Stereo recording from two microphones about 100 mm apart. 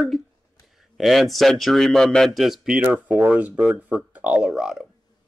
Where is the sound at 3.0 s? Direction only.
15° right (ahead or behind).